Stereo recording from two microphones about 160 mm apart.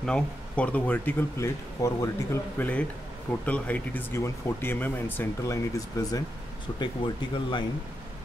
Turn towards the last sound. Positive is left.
turn(degrees=30)  # may be behind; listen again after turning